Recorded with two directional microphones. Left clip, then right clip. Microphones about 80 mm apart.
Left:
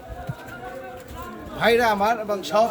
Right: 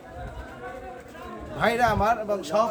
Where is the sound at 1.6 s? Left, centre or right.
Right.